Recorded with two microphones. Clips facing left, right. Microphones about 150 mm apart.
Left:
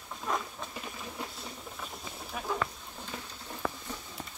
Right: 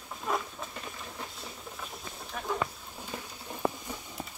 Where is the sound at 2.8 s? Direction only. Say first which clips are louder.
Right 1 dB; 10° right (ahead or behind).